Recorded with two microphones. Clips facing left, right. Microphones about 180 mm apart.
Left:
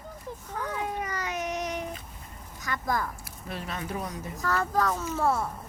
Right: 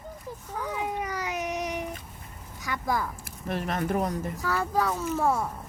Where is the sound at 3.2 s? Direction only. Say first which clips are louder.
Right 6 dB; 50° right (ahead or behind).